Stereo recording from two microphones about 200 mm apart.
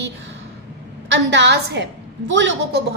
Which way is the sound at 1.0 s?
65° right (ahead or behind).